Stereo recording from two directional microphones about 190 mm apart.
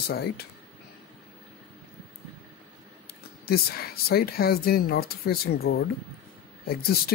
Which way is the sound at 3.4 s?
55° left (ahead or behind).